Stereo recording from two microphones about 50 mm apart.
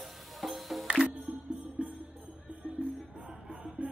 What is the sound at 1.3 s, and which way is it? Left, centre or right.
Music, right.